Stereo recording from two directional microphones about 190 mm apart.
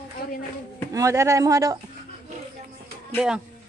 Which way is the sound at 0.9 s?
15° right (ahead or behind).